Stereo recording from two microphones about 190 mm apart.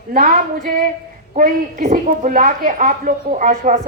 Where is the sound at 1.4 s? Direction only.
45° right (ahead or behind).